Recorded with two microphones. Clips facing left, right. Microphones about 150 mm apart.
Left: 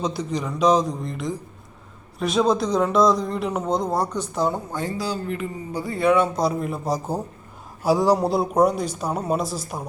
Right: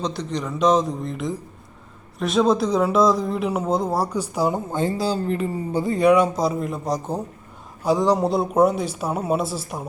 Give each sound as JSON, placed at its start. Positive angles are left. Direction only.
{"t": 0.0, "sound": "speech", "side_deg": 5}
{"t": 4.5, "sound": "speech", "side_deg": -25}
{"t": 5.8, "sound": "speech", "side_deg": -20}
{"t": 6.3, "sound": "speech", "side_deg": 0}